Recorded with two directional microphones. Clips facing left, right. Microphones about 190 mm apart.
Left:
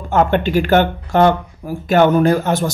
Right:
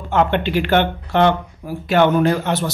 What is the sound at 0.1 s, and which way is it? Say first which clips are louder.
Speech: left 3 dB; 45° left (ahead or behind).